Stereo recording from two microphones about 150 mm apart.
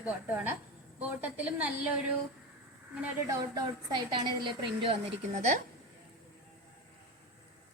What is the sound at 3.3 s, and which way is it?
Speech, 25° right (ahead or behind).